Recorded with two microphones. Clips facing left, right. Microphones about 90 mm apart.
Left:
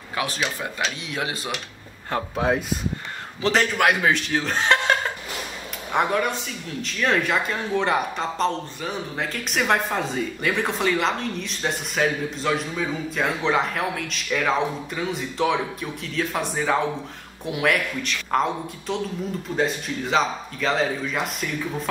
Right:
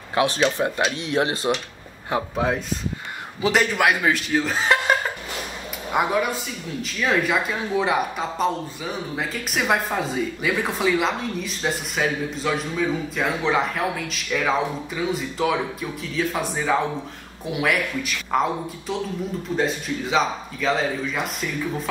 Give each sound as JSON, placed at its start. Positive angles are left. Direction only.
{"t": 0.2, "sound": "speech", "side_deg": -25}
{"t": 2.0, "sound": "speech", "side_deg": -10}
{"t": 3.4, "sound": "speech", "side_deg": -5}